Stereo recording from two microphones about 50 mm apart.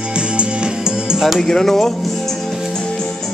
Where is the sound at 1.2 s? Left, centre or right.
Centre.